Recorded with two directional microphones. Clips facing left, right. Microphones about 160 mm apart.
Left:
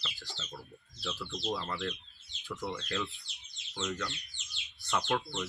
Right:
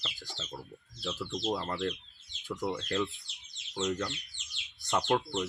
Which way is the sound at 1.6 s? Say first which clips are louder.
Right 3 dB; 40° right (ahead or behind).